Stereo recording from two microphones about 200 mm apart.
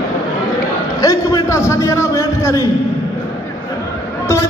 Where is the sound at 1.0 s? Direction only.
15° left (ahead or behind).